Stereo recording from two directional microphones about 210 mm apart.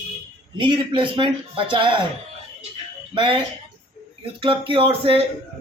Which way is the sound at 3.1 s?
25° right (ahead or behind).